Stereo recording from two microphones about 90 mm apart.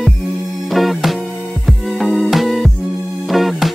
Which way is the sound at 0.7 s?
Centre (ahead or behind).